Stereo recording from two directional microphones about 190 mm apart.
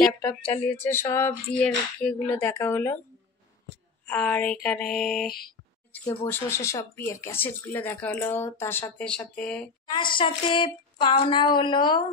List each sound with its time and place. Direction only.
0.0 s speech: 10° left (ahead or behind)
4.0 s mantra: 5° left (ahead or behind)
5.9 s speech: 10° left (ahead or behind)
9.8 s speech: 25° left (ahead or behind)